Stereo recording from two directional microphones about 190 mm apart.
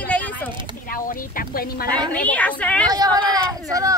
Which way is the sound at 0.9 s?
50° left (ahead or behind).